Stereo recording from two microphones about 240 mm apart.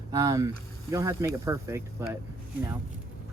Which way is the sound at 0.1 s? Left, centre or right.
Centre.